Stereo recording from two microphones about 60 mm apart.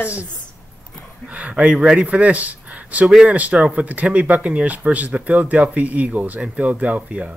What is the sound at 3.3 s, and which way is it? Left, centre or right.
Speech, right.